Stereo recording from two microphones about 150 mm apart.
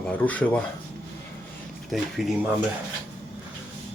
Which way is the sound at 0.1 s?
10° left (ahead or behind).